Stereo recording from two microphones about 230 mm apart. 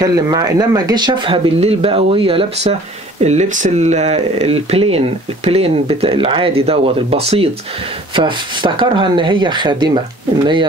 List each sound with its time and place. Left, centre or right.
0.0 s speech: centre